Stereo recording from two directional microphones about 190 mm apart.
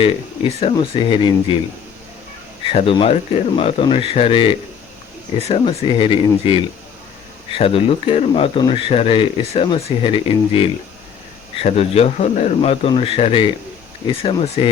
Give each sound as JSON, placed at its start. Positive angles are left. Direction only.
{"t": 0.6, "sound": "speech", "side_deg": 25}
{"t": 2.7, "sound": "speech", "side_deg": 30}
{"t": 7.6, "sound": "speech", "side_deg": 30}